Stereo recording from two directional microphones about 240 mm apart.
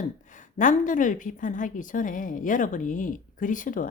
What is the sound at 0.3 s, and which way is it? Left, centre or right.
Speech, left.